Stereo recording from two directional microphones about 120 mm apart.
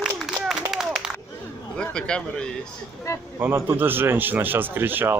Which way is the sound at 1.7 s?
5° left (ahead or behind).